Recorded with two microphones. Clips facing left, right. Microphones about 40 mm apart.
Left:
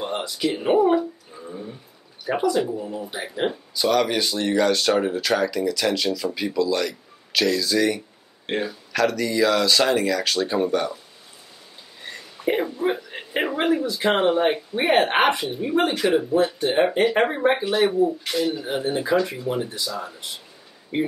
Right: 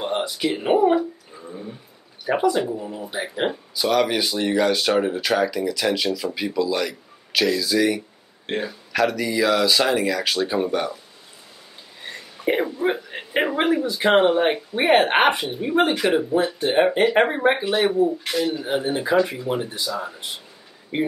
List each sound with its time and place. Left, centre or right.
0.0 s speech: centre
2.2 s speech: centre
8.9 s speech: centre
12.4 s speech: centre
14.1 s speech: centre
16.0 s speech: centre